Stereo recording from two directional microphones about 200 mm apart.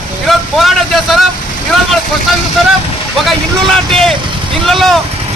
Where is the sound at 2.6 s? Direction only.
Centre (ahead or behind).